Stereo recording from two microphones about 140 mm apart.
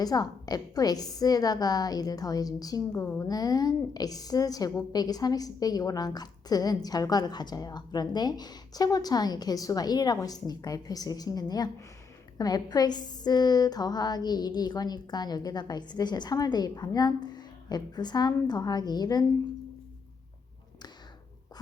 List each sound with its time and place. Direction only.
0.0 s a woman's voice: 30° left (ahead or behind)